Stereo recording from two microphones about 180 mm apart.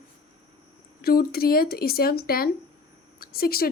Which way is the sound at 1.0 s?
55° left (ahead or behind).